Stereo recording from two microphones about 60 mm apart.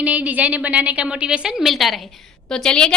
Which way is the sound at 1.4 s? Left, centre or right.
Centre.